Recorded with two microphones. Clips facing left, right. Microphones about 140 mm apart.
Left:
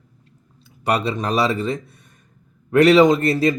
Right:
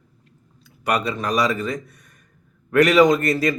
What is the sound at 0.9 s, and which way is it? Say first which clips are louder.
A man's voice: left 2 dB; 30° left (ahead or behind).